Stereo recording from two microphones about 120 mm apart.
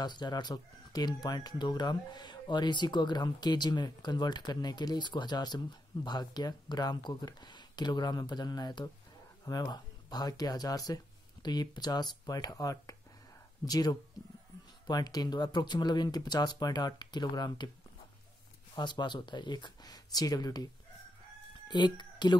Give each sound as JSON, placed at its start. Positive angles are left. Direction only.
{"t": 0.0, "sound": "speech", "side_deg": 35}
{"t": 18.8, "sound": "speech", "side_deg": 40}